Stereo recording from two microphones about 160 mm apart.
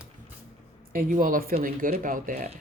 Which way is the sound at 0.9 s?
55° right (ahead or behind).